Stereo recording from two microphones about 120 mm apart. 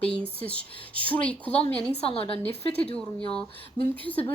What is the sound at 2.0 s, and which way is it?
Speech, 55° left (ahead or behind).